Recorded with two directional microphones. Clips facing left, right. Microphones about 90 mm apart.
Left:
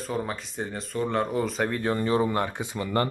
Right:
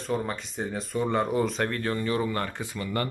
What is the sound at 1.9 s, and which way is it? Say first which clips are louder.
Speech: left 3 dB; 25° left (ahead or behind).